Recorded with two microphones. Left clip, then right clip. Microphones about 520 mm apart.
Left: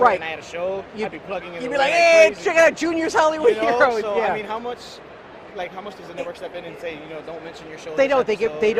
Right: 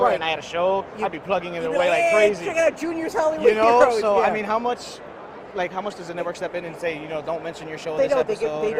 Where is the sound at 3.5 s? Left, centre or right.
Right.